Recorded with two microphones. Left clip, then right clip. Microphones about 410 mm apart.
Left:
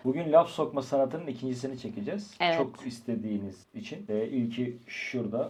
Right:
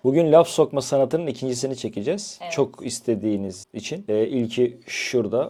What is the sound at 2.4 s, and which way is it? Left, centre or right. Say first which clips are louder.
Speech: left 5 dB; left.